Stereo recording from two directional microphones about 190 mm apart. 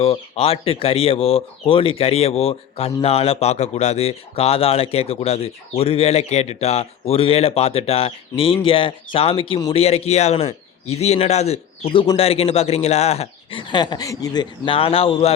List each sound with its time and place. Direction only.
0.0 s speech: 30° left (ahead or behind)